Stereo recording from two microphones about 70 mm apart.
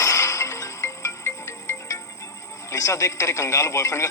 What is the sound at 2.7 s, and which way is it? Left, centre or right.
Speech, left.